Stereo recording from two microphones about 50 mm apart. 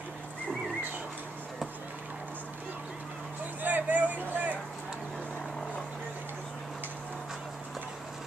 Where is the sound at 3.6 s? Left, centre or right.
Right.